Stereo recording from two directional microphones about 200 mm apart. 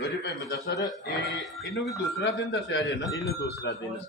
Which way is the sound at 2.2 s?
65° left (ahead or behind).